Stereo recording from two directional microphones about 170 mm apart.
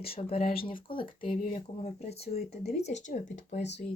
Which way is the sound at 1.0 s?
55° left (ahead or behind).